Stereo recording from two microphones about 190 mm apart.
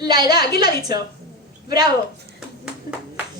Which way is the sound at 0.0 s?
20° right (ahead or behind).